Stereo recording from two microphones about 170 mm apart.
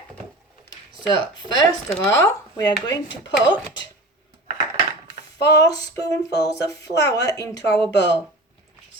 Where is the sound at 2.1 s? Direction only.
15° left (ahead or behind).